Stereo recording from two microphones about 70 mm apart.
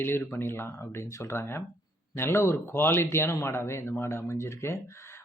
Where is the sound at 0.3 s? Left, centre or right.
Left.